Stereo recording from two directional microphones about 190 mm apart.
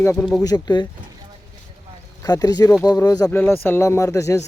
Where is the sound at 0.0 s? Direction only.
10° left (ahead or behind).